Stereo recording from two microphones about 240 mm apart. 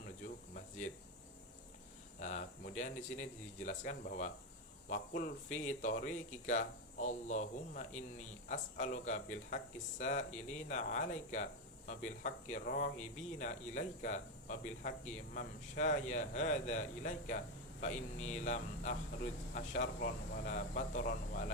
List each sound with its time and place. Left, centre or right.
2.1 s speech: left